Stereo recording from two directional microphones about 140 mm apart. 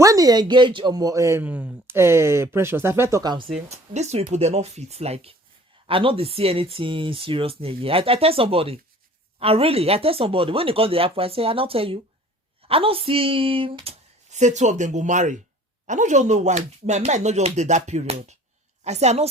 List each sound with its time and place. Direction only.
0.0 s speech: 25° right (ahead or behind)
3.7 s a woman's voice: 50° right (ahead or behind)